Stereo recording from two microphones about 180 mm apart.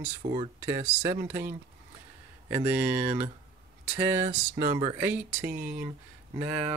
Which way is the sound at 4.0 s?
15° right (ahead or behind).